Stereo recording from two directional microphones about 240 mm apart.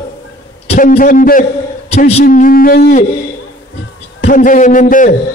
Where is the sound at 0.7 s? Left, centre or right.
Left.